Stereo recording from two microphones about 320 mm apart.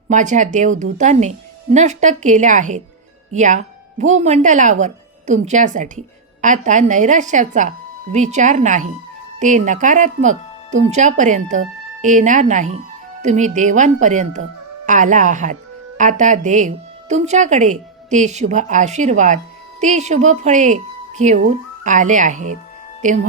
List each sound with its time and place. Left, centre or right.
0.1 s speech: right